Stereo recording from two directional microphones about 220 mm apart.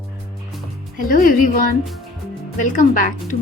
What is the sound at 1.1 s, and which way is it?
Speech, 40° left (ahead or behind).